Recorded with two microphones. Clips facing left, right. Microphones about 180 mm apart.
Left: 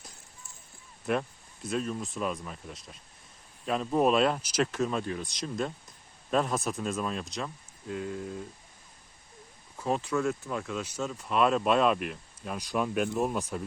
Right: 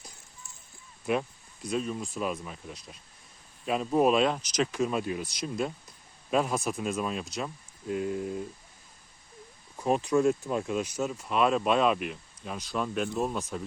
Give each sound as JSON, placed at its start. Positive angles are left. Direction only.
{"t": 1.6, "sound": "speech", "side_deg": 0}
{"t": 7.9, "sound": "speech", "side_deg": -20}
{"t": 9.7, "sound": "speech", "side_deg": -15}
{"t": 11.2, "sound": "speech", "side_deg": 0}
{"t": 12.5, "sound": "speech", "side_deg": 10}